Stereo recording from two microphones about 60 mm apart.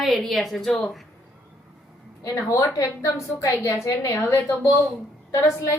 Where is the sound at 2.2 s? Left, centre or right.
Left.